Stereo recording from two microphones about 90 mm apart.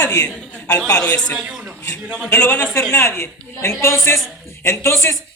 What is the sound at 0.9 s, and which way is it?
Speech, 10° left (ahead or behind).